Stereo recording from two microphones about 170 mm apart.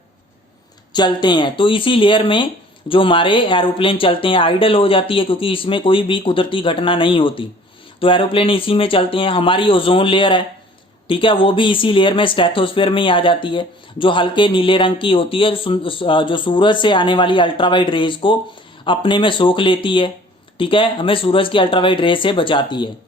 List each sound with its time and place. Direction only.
0.9 s speech: 25° left (ahead or behind)